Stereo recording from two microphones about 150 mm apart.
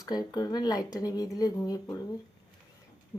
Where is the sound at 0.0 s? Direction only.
25° left (ahead or behind).